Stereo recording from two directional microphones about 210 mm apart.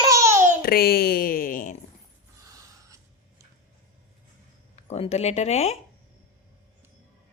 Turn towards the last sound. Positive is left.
turn(degrees=30)  # may be behind; listen again after turning